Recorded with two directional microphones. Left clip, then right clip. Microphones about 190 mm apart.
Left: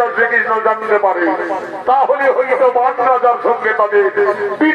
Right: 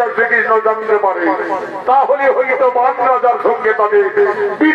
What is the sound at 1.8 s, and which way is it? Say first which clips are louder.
A man's voice: right 1 dB; 15° left (ahead or behind).